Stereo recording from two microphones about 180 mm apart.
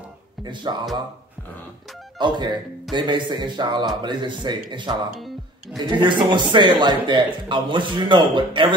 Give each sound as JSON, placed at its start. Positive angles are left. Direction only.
{"t": 0.4, "sound": "a man's voice", "side_deg": -25}
{"t": 2.1, "sound": "a man's voice", "side_deg": -25}